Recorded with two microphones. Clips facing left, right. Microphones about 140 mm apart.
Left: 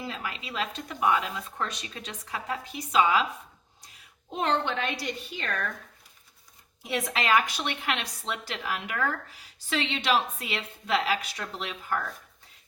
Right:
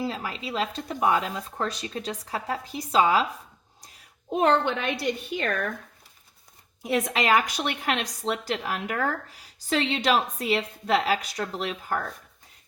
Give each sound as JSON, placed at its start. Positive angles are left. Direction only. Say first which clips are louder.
{"t": 0.0, "sound": "speech", "louder": "right 5 dB", "side_deg": -35}
{"t": 4.3, "sound": "a woman's voice", "louder": "right 6 dB", "side_deg": -50}
{"t": 7.3, "sound": "speech", "louder": "even", "side_deg": -45}